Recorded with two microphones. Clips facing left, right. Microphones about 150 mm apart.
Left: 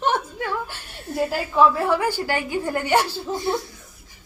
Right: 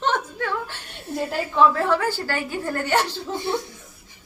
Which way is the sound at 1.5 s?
10° left (ahead or behind).